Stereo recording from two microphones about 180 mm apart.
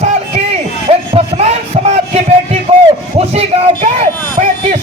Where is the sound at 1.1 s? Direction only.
35° right (ahead or behind).